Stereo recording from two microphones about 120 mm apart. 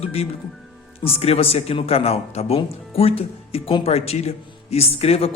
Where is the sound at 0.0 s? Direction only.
55° left (ahead or behind).